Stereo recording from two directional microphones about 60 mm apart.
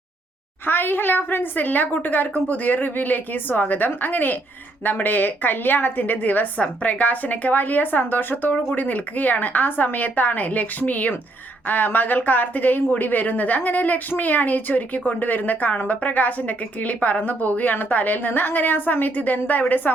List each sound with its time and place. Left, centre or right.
0.6 s a woman's voice: left